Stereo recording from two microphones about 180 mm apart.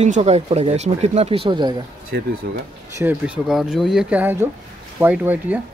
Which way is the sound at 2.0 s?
60° right (ahead or behind).